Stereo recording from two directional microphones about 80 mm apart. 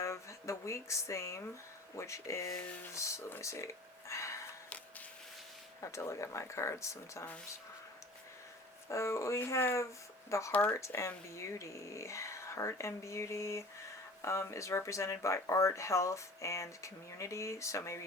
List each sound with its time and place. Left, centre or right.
0.0 s speech: left
2.6 s speech: centre
2.9 s speech: left
4.1 s a sound: left
5.8 s speech: left
8.9 s speech: left